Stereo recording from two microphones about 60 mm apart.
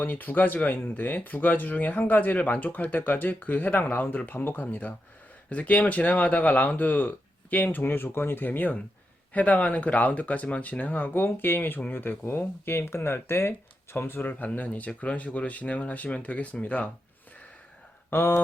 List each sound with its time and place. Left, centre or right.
0.0 s speech: left
18.1 s speech: left